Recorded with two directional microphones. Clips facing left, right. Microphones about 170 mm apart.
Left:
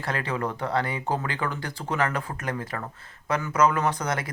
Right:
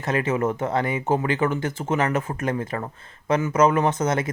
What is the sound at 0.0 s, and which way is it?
Speech, 20° right (ahead or behind).